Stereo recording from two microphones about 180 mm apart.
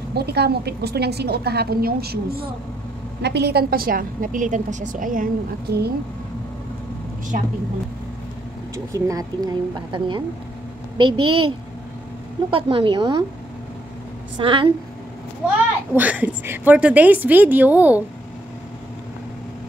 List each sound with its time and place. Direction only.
0.1 s a woman's voice: 65° right (ahead or behind)
3.2 s a woman's voice: 70° right (ahead or behind)
8.7 s speech: 20° right (ahead or behind)
14.4 s speech: 30° right (ahead or behind)
15.4 s a woman's voice: 10° right (ahead or behind)